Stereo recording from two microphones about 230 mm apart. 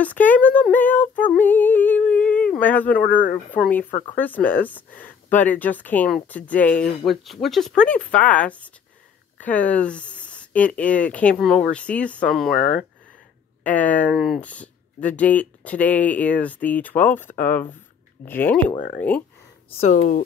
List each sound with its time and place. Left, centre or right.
0.0 s speech: centre
3.0 s speech: left
3.5 s speech: centre
12.4 s speech: left
13.7 s speech: centre
19.8 s speech: left